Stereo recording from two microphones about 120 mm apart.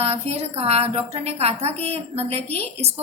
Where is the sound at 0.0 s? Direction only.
55° right (ahead or behind).